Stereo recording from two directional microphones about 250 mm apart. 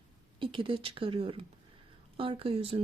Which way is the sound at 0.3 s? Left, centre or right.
Right.